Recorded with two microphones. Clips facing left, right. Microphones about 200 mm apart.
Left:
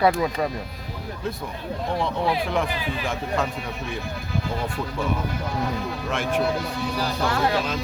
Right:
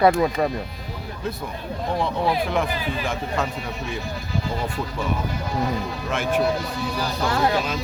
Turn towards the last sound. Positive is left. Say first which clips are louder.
# right 2 dB
turn(degrees=-25)  # may be behind; listen again after turning